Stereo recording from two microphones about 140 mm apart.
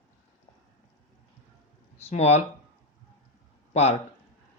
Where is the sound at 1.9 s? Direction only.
50° left (ahead or behind).